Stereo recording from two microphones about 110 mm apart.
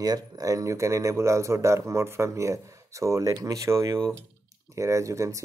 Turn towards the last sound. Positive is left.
turn(degrees=-30)  # may be behind; listen again after turning